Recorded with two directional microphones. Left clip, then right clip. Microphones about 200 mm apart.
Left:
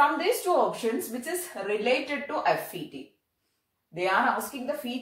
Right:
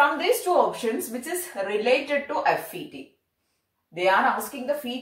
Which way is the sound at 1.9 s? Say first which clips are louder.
Right 6 dB; 10° left (ahead or behind).